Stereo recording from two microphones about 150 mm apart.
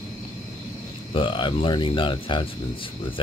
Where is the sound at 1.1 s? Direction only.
35° left (ahead or behind).